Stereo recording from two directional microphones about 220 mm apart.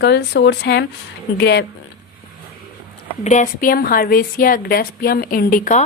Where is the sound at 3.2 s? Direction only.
30° left (ahead or behind).